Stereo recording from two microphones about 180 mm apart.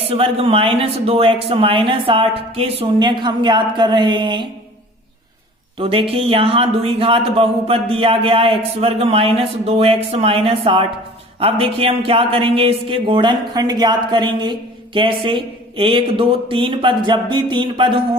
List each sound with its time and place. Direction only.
0.1 s speech: 30° right (ahead or behind)
5.7 s speech: 30° right (ahead or behind)